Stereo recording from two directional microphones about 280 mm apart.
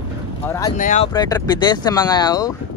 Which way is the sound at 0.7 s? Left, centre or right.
Left.